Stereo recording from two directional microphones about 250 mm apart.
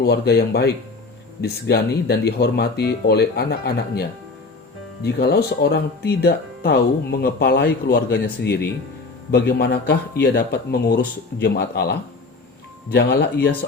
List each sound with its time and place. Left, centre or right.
0.0 s speech: left
5.0 s speech: left